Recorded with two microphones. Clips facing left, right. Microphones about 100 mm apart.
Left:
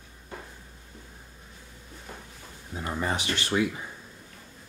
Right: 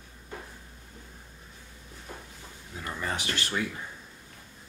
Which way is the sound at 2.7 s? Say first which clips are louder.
Left 4 dB; 25° left (ahead or behind).